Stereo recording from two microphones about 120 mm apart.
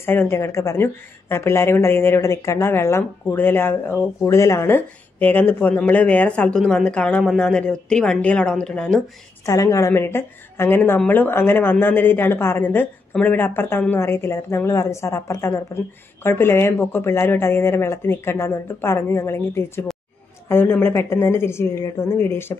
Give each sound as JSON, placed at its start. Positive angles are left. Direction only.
{"t": 0.0, "sound": "speech", "side_deg": 20}
{"t": 9.5, "sound": "speech", "side_deg": 30}